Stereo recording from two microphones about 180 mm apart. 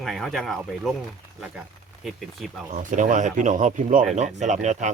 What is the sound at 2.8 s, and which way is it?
Speech, 45° right (ahead or behind).